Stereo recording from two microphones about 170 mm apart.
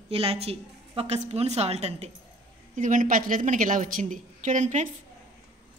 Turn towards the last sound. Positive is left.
turn(degrees=-45)  # may be behind; listen again after turning